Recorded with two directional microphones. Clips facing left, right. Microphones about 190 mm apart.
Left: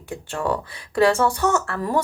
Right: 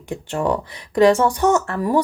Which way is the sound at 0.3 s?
20° right (ahead or behind).